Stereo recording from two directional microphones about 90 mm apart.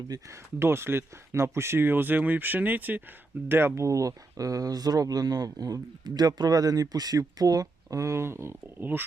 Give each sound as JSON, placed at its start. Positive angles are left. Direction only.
{"t": 0.1, "sound": "speech", "side_deg": -30}